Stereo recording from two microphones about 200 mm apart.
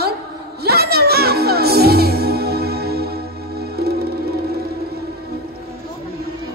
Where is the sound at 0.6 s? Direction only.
50° right (ahead or behind).